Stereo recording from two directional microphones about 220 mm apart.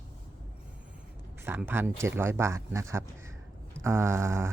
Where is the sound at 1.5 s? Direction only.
10° right (ahead or behind).